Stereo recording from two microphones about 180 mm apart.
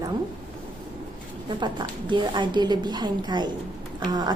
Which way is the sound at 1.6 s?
25° right (ahead or behind).